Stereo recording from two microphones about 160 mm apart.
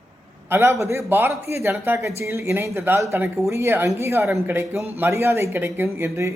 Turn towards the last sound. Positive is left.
turn(degrees=-15)  # may be behind; listen again after turning